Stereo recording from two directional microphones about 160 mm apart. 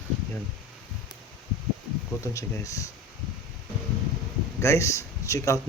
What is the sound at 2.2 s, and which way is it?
Speech, 20° left (ahead or behind).